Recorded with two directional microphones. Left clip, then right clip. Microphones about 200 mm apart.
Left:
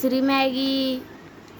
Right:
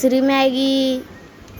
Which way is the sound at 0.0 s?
15° right (ahead or behind).